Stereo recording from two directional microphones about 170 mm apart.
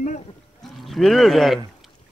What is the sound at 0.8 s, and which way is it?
Speech, centre (ahead or behind).